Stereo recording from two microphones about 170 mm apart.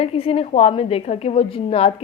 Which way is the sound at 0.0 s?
35° left (ahead or behind).